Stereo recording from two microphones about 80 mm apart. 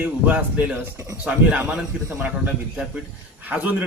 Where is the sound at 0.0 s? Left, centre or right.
Centre.